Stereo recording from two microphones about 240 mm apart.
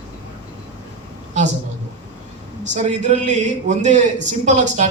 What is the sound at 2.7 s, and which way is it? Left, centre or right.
A man's voice, right.